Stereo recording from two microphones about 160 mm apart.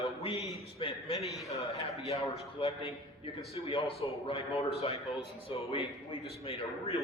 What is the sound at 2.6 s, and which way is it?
A man's voice, 40° left (ahead or behind).